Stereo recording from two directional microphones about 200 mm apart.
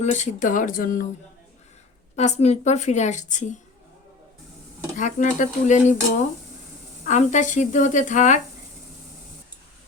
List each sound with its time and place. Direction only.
0.0 s a woman's voice: 35° left (ahead or behind)
2.1 s a woman's voice: 35° left (ahead or behind)
4.9 s a woman's voice: 40° left (ahead or behind)
7.0 s a woman's voice: 35° left (ahead or behind)